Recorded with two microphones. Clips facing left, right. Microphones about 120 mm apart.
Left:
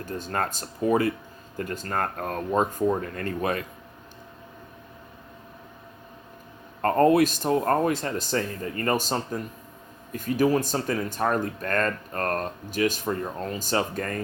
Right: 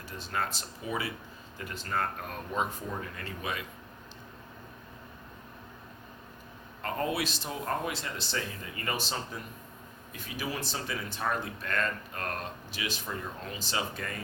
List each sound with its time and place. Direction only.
0.0 s speech: 50° left (ahead or behind)
6.8 s speech: 50° left (ahead or behind)